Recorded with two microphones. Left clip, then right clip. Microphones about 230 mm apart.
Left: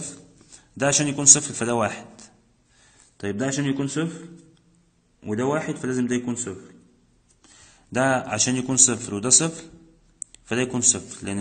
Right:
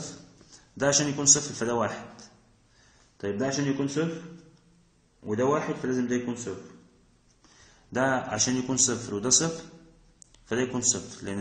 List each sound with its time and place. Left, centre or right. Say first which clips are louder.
0.6 s a man's voice: left 3 dB; left
5.2 s a man's voice: left 1 dB; left
7.9 s a man's voice: left 4 dB; left